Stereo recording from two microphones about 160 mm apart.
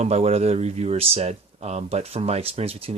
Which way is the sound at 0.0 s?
40° right (ahead or behind).